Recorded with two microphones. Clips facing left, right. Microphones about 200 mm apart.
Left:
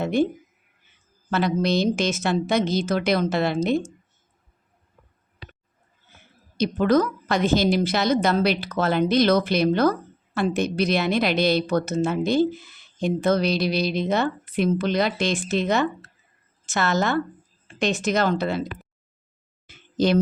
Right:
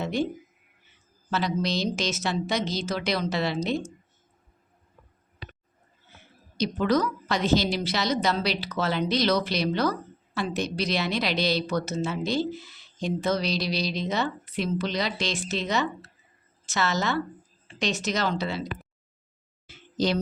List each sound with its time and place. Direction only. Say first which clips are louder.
0.0 s speech: left 6 dB; 55° left (ahead or behind)
1.3 s a woman's voice: left 5 dB; 55° left (ahead or behind)
6.6 s a woman's voice: left 4 dB; 50° left (ahead or behind)
19.6 s a sound: left 5 dB; 55° left (ahead or behind)